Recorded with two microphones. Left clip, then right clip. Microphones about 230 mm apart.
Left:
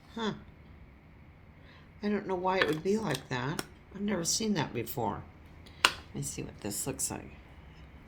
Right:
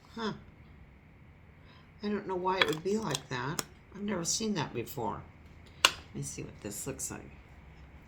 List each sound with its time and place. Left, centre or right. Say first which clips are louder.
0.1 s speech: left 2 dB; left
2.0 s speech: left 2 dB; left
6.1 s speech: left 2 dB; left